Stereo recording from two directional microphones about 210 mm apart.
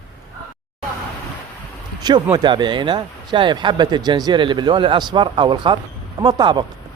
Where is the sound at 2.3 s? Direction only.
20° right (ahead or behind).